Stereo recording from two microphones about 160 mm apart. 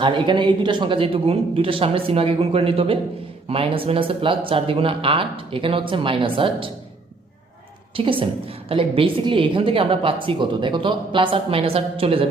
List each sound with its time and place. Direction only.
0.0 s a woman's voice: 30° right (ahead or behind)
7.9 s a woman's voice: 35° right (ahead or behind)